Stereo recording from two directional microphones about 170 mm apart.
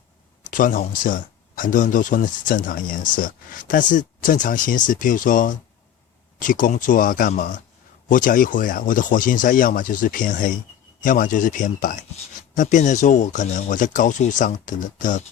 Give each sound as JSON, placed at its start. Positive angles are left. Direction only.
{"t": 0.5, "sound": "speech", "side_deg": 55}